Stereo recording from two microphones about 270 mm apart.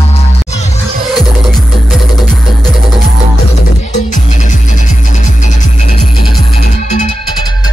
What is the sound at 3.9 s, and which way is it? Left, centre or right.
Music, left.